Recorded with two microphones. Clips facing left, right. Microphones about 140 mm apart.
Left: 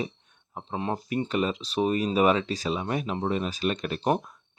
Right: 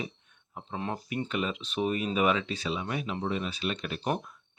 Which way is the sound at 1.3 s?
40° left (ahead or behind).